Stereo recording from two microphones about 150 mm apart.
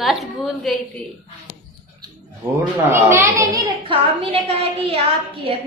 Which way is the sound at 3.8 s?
40° right (ahead or behind).